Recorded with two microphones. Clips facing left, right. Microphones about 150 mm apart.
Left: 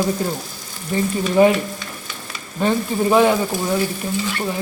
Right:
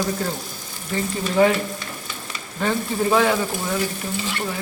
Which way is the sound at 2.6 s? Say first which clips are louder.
Left 3 dB; 20° left (ahead or behind).